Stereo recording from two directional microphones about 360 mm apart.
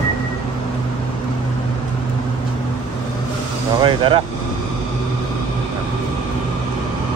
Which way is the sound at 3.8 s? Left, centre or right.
Centre.